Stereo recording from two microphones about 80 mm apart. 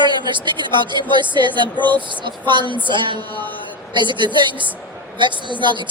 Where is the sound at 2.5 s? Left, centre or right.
Right.